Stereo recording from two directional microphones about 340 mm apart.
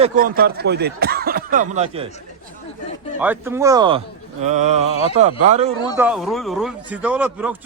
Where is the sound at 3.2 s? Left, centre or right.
Centre.